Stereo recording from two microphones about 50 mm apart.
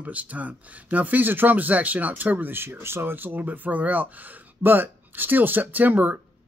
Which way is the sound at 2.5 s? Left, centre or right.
Right.